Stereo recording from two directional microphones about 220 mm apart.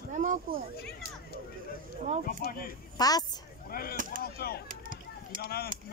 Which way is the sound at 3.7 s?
40° left (ahead or behind).